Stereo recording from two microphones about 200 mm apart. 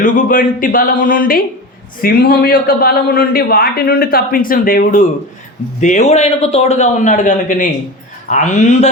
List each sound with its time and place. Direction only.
0.0 s a man's voice: 40° left (ahead or behind)